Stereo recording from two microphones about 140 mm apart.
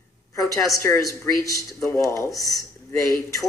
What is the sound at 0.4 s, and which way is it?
A woman's voice, 25° left (ahead or behind).